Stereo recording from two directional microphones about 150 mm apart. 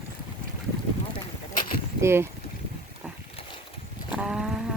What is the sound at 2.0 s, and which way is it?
Speech, 15° right (ahead or behind).